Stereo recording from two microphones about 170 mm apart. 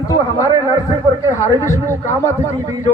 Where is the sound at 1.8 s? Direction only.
15° left (ahead or behind).